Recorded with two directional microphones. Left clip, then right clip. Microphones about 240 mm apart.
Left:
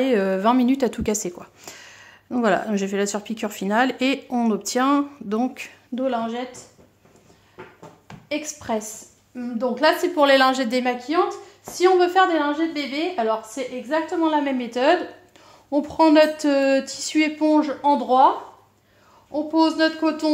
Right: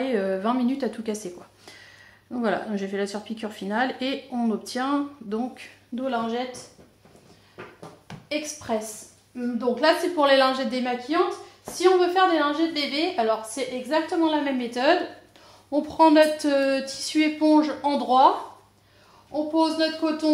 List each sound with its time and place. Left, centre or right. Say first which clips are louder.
0.0 s speech: left 5 dB; left
8.1 s a sound: even; centre
8.5 s speech: left 2 dB; left
12.3 s a woman's voice: left 1 dB; left
19.3 s speech: left 3 dB; left